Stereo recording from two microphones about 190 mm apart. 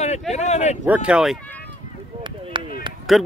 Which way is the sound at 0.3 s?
35° left (ahead or behind).